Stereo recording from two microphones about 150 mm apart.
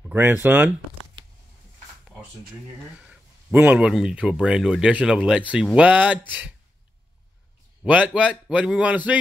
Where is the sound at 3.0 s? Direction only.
10° right (ahead or behind).